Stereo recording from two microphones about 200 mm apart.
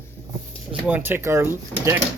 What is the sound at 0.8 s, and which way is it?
Speech, 10° right (ahead or behind).